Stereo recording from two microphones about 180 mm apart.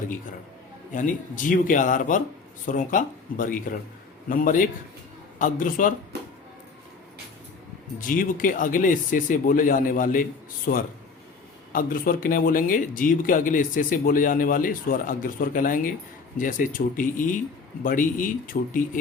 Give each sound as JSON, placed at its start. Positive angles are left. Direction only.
{"t": 0.9, "sound": "speech", "side_deg": 45}
{"t": 8.0, "sound": "speech", "side_deg": 50}